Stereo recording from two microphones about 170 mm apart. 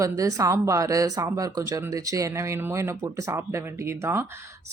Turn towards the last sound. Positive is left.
turn(degrees=-15)  # may be behind; listen again after turning